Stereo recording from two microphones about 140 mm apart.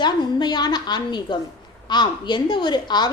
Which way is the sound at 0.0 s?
30° left (ahead or behind).